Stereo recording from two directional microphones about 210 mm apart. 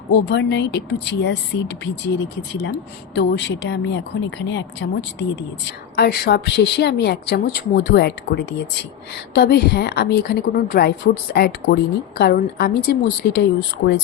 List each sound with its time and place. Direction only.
0.1 s speech: 55° left (ahead or behind)
3.2 s a woman's voice: 55° left (ahead or behind)